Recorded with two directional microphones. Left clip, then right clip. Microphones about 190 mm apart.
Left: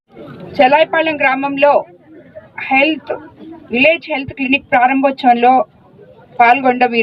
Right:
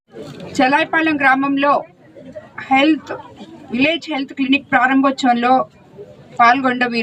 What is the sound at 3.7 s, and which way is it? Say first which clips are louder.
A woman's voice: left 6 dB; 40° left (ahead or behind).